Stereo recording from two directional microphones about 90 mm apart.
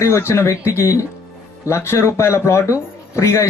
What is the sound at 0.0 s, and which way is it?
A man's voice, 30° left (ahead or behind).